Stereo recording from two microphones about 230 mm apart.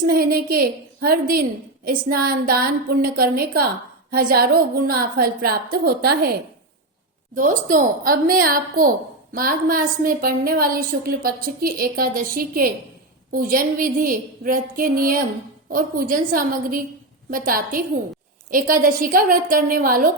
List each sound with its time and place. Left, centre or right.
0.1 s a woman's voice: right
7.3 s a woman's voice: right